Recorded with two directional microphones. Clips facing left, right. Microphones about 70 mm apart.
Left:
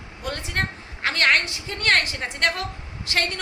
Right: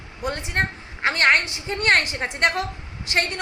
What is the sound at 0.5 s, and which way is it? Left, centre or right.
A woman's voice, right.